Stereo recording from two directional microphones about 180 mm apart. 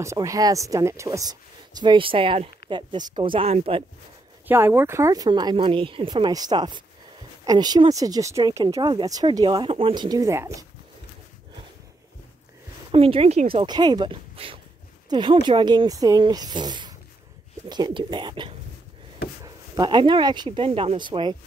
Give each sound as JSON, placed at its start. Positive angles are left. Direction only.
{"t": 0.0, "sound": "speech", "side_deg": -15}
{"t": 4.5, "sound": "speech", "side_deg": -10}
{"t": 12.9, "sound": "speech", "side_deg": -30}